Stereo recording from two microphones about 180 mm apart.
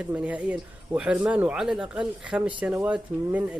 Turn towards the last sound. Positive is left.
turn(degrees=-10)  # may be behind; listen again after turning